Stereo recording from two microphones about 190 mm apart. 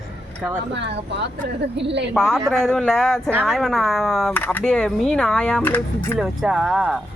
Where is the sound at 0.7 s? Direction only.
65° right (ahead or behind).